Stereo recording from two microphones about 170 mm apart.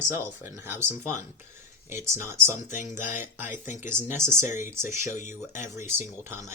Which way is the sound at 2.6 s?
45° left (ahead or behind).